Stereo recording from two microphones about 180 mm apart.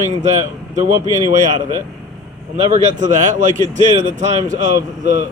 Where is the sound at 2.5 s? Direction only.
40° right (ahead or behind).